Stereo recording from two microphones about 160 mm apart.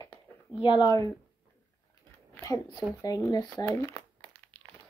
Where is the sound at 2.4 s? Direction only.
20° left (ahead or behind).